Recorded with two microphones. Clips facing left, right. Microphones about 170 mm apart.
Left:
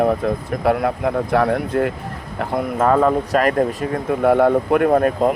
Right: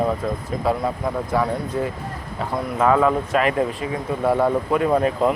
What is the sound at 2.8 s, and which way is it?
Speech, 40° left (ahead or behind).